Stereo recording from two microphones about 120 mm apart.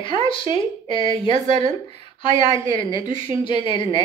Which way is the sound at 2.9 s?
45° left (ahead or behind).